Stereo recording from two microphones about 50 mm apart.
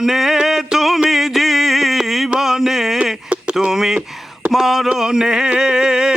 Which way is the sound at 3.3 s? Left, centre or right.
Centre.